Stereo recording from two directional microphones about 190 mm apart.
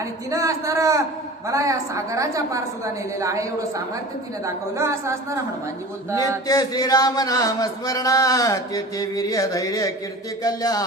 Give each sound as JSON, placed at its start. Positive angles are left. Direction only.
{"t": 0.3, "sound": "a woman's voice", "side_deg": -15}
{"t": 4.4, "sound": "a woman's voice", "side_deg": -15}
{"t": 6.5, "sound": "a sound", "side_deg": 20}